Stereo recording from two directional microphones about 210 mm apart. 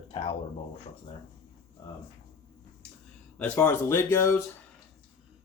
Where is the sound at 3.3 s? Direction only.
5° left (ahead or behind).